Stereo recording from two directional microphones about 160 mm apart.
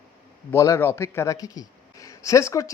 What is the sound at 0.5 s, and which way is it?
A man's voice, 20° left (ahead or behind).